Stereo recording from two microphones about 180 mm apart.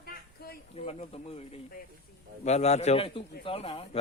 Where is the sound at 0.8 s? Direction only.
35° left (ahead or behind).